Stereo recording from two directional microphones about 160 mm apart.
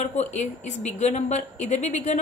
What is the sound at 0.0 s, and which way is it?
A woman's voice, 45° left (ahead or behind).